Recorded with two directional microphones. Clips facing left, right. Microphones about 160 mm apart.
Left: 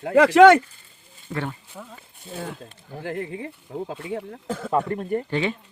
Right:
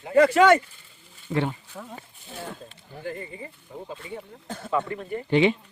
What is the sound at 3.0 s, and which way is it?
Speech, 85° left.